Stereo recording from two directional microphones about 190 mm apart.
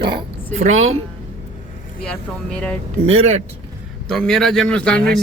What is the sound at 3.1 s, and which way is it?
Speech, 35° right (ahead or behind).